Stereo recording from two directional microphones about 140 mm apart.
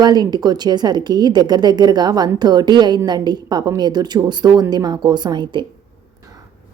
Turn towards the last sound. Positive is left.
turn(degrees=-35)  # may be behind; listen again after turning